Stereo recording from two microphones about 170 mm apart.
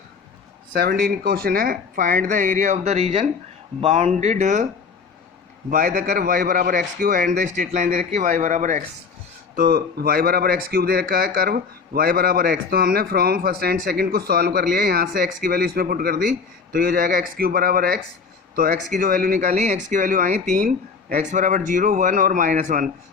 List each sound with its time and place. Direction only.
0.7 s speech: 60° right (ahead or behind); by 4.7 s 45° right (ahead or behind)
5.7 s speech: 50° right (ahead or behind)
9.6 s speech: 60° right (ahead or behind)